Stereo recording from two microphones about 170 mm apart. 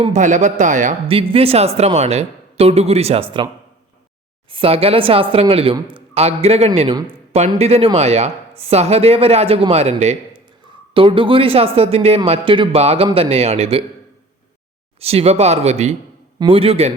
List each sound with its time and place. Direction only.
0.0 s speech: 45° right (ahead or behind)
1.0 s speech: 30° right (ahead or behind)
4.5 s speech: 35° right (ahead or behind)
15.0 s speech: 35° right (ahead or behind)